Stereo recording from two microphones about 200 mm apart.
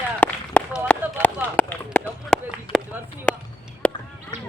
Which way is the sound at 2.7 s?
25° left (ahead or behind).